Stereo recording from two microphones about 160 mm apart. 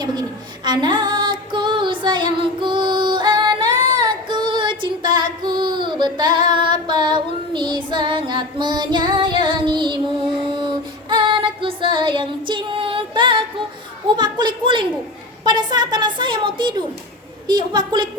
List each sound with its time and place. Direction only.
0.0 s female singing: 25° right (ahead or behind)
10.5 s child singing: 30° right (ahead or behind)
14.2 s a woman's voice: 25° right (ahead or behind)